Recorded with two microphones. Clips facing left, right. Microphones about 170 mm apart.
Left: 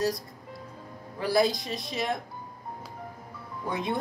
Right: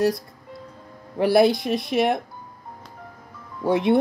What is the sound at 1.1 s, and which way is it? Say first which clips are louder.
Speech: right 8 dB; 65° right (ahead or behind).